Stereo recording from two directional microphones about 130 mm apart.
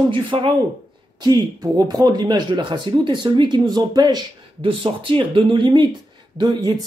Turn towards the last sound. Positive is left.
turn(degrees=-35)  # may be behind; listen again after turning